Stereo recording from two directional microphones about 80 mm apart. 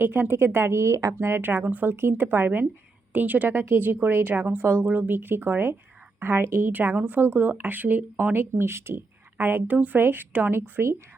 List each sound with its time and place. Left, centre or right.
0.0 s speech: right